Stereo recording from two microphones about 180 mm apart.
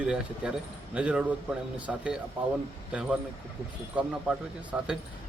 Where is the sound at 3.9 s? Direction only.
5° right (ahead or behind).